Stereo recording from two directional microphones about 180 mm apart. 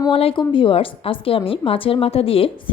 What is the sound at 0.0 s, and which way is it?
A woman's voice, 30° left (ahead or behind).